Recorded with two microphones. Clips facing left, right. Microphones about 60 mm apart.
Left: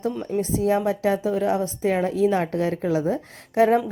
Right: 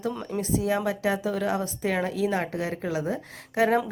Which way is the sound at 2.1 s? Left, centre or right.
Left.